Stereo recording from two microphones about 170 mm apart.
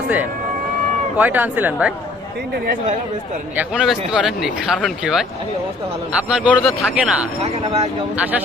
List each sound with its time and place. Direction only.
1.2 s speech: 10° right (ahead or behind)
3.6 s speech: 5° right (ahead or behind)
6.2 s speech: 5° right (ahead or behind)
7.4 s speech: 40° right (ahead or behind)